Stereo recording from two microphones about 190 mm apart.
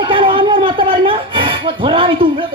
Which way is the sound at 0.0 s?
25° right (ahead or behind).